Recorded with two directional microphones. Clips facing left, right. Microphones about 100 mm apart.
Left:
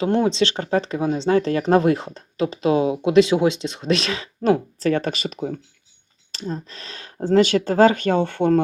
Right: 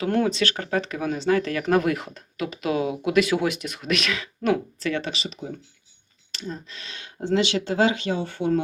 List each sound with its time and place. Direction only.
0.0 s speech: 25° left (ahead or behind); by 5.5 s 50° left (ahead or behind)
6.3 s speech: 40° left (ahead or behind); by 8.6 s 65° left (ahead or behind)